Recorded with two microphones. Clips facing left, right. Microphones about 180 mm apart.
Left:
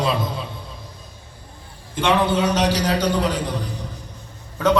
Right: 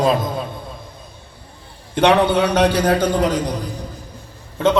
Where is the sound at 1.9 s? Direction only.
65° right (ahead or behind); by 3.6 s 45° right (ahead or behind).